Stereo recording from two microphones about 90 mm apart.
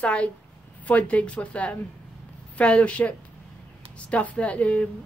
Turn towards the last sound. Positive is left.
turn(degrees=15)  # may be behind; listen again after turning